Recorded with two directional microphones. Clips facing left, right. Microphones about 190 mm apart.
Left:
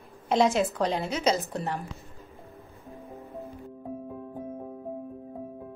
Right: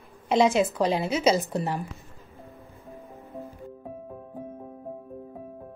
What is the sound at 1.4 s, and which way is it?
Speech, 20° right (ahead or behind).